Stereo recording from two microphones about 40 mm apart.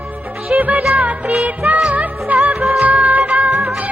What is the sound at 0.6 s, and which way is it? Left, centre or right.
Music, right.